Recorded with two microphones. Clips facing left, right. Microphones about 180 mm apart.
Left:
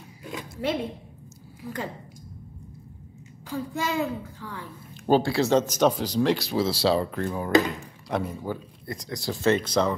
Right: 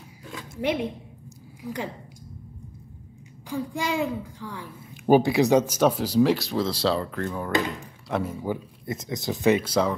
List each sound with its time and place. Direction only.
0.2 s zipper: 15° left (ahead or behind)
1.6 s speech: 15° right (ahead or behind)
3.4 s a woman's voice: 10° right (ahead or behind); by 7.5 s 10° left (ahead or behind)
8.1 s a woman's voice: 5° right (ahead or behind)